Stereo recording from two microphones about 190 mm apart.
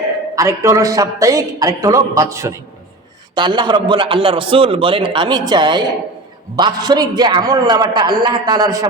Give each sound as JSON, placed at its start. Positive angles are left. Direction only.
{"t": 0.3, "sound": "a man's voice", "side_deg": -15}